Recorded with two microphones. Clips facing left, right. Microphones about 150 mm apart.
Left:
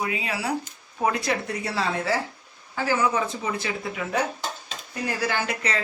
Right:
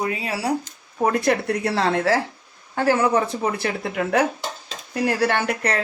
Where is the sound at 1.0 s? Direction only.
50° right (ahead or behind); by 2.2 s 80° right.